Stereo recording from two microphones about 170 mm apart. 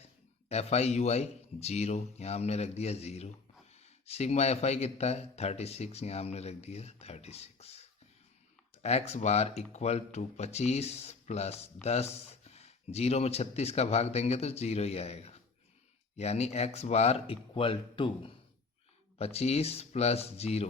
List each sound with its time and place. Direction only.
0.4 s speech: 40° left (ahead or behind)